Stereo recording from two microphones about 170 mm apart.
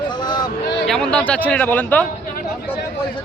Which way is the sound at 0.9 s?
5° left (ahead or behind).